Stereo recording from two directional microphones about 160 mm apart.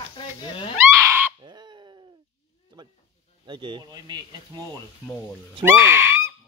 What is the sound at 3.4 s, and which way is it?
Speech, 30° right (ahead or behind).